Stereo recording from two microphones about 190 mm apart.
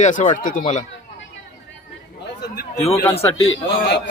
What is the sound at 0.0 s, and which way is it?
Speech, 40° left (ahead or behind).